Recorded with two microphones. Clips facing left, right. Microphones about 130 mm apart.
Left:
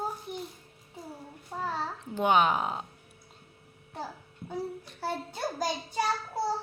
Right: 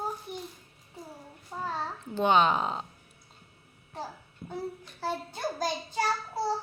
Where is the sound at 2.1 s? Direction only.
10° left (ahead or behind).